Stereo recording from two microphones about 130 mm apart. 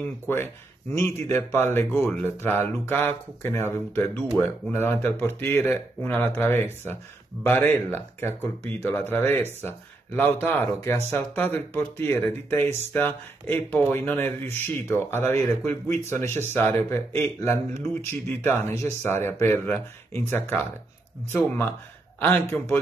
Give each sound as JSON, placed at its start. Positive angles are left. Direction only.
{"t": 0.0, "sound": "speech", "side_deg": 15}
{"t": 22.2, "sound": "speech", "side_deg": 15}